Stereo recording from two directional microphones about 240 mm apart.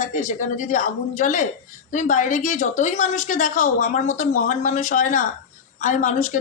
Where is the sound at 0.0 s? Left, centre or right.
Left.